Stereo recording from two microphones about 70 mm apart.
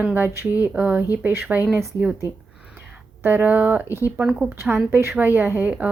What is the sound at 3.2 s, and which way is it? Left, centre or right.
Speech, right.